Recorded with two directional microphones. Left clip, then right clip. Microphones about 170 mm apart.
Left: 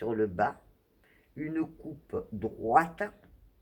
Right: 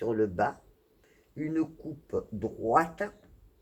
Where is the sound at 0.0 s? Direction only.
25° right (ahead or behind).